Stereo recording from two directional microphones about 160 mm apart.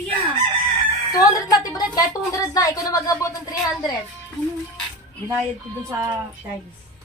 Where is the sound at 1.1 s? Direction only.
25° left (ahead or behind).